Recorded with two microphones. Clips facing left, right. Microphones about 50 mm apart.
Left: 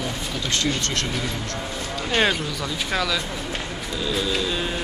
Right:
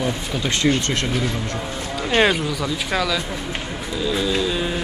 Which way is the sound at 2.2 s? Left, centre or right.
Centre.